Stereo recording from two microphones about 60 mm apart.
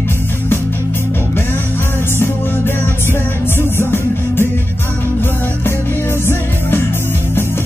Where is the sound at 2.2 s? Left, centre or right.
Left.